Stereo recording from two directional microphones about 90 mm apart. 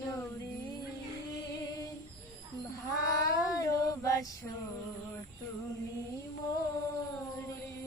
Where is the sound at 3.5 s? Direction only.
35° left (ahead or behind).